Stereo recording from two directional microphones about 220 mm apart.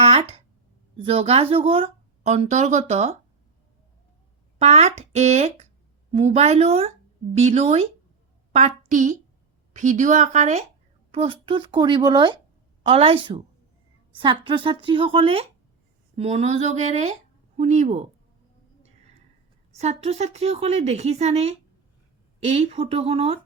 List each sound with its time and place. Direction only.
0.0 s a sound: 25° right (ahead or behind)
0.9 s speech: 25° right (ahead or behind)
4.5 s a woman's voice: 30° right (ahead or behind)
19.7 s speech: 30° right (ahead or behind)